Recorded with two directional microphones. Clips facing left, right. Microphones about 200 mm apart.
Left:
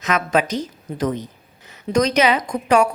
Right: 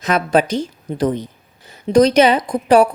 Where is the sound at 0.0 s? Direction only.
30° right (ahead or behind).